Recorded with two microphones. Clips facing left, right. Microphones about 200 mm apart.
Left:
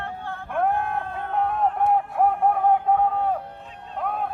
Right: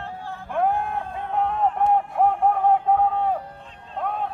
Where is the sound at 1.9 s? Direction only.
5° left (ahead or behind).